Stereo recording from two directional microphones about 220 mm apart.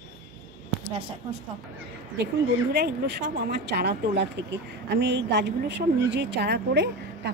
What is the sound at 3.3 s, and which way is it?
A woman's voice, 50° right (ahead or behind).